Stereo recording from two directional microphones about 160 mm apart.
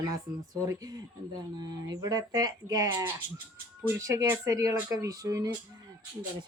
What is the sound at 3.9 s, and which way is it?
Speech, 20° right (ahead or behind).